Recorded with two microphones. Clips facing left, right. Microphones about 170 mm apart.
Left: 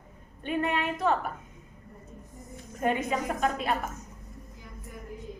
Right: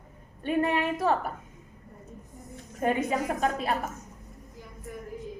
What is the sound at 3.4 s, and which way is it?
Speech, 35° right (ahead or behind).